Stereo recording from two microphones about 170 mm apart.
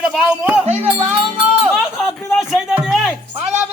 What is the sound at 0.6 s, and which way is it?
Speech, 40° right (ahead or behind).